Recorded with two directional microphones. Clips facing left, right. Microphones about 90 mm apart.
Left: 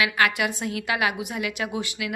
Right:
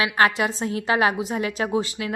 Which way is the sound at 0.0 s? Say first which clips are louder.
Right 3 dB; 30° right (ahead or behind).